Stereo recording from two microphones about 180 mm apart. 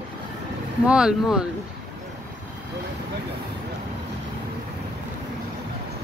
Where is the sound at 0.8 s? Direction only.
5° right (ahead or behind).